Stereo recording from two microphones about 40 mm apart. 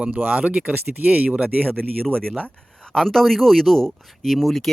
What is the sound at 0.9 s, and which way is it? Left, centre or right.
Speech, right.